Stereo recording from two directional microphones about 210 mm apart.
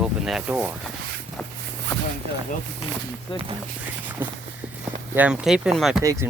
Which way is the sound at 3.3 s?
25° left (ahead or behind).